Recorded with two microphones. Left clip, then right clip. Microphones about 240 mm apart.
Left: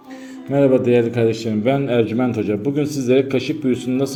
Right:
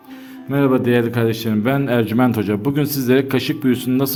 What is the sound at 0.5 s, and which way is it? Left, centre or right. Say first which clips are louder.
A man's voice: left 2 dB; centre.